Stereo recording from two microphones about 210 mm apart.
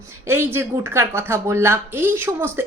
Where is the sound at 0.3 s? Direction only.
10° right (ahead or behind).